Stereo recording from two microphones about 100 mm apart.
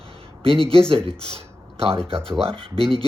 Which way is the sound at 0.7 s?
65° right (ahead or behind).